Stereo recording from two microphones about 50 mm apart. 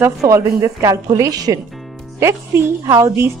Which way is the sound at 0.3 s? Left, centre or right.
Right.